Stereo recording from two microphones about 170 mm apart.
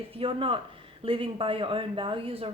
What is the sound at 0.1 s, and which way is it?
Speech, 30° right (ahead or behind).